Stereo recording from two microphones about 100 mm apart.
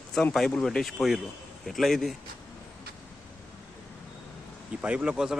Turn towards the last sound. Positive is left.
turn(degrees=-5)  # may be behind; listen again after turning